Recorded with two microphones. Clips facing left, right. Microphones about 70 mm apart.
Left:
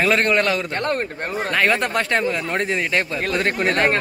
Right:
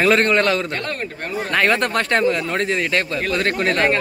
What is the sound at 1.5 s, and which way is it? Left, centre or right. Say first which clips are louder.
Speech: right 2 dB; centre.